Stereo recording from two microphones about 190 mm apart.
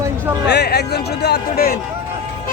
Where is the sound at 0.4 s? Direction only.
60° left (ahead or behind).